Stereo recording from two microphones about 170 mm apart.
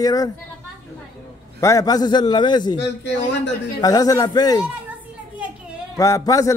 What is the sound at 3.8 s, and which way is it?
Speech, 20° left (ahead or behind).